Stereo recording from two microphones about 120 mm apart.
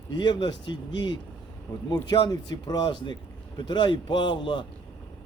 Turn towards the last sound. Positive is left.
turn(degrees=40)  # may be behind; listen again after turning